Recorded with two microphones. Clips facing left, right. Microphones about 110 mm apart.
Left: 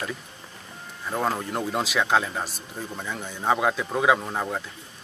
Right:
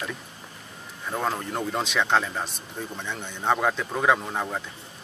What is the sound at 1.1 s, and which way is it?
Speech, 5° left (ahead or behind).